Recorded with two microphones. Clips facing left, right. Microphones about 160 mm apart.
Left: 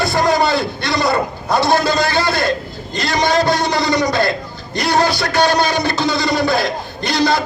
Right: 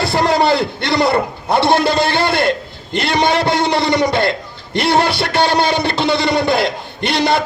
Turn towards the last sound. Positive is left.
turn(degrees=-25)  # may be behind; listen again after turning